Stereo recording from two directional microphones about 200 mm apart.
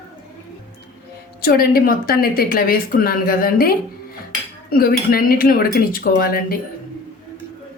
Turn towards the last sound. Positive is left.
turn(degrees=50)  # may be behind; listen again after turning